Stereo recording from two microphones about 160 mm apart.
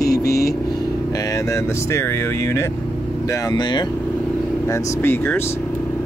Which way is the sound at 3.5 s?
25° left (ahead or behind).